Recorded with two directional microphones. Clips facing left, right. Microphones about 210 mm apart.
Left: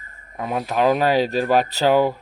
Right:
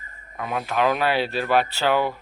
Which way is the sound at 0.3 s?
35° left (ahead or behind).